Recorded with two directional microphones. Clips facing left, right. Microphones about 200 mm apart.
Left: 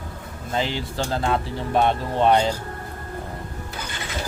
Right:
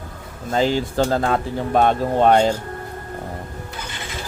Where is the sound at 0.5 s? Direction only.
45° right (ahead or behind).